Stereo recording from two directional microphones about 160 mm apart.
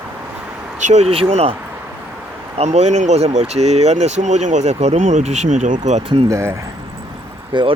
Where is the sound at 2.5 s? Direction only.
45° right (ahead or behind).